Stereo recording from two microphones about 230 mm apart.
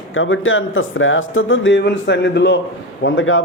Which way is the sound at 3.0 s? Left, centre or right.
Left.